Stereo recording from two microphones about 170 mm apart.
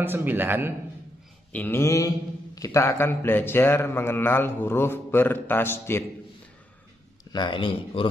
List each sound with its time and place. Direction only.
0.0 s a man's voice: 10° right (ahead or behind)
1.5 s speech: 10° left (ahead or behind)
7.3 s speech: 30° left (ahead or behind)